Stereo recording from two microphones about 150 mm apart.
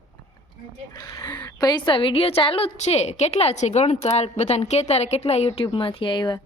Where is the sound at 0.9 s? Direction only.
20° left (ahead or behind).